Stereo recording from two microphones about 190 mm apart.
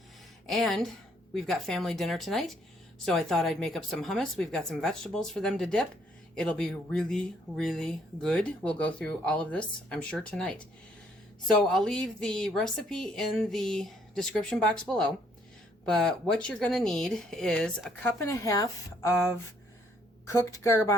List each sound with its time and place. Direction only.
0.4 s speech: centre (ahead or behind); by 19.1 s 15° left (ahead or behind)
20.2 s speech: 15° left (ahead or behind)